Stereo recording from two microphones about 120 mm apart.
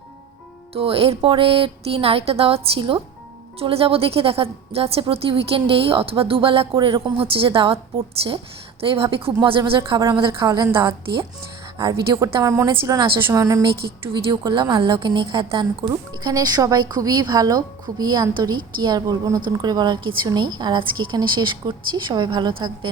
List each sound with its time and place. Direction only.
0.7 s a woman's voice: 50° right (ahead or behind); by 13.7 s 30° right (ahead or behind)
14.1 s a woman's voice: 40° right (ahead or behind)